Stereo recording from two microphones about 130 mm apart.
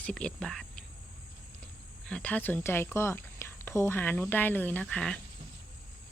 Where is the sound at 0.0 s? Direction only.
5° left (ahead or behind).